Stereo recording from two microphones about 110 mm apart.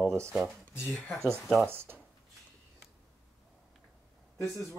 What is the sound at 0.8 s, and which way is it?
Speech, 15° left (ahead or behind).